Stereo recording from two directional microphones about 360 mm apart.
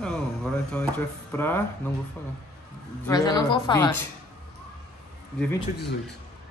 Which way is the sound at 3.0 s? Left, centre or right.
Centre.